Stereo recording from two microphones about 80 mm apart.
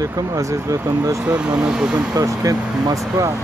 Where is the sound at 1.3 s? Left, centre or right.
Centre.